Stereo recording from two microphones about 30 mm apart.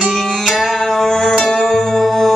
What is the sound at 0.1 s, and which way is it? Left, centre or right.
Music, centre.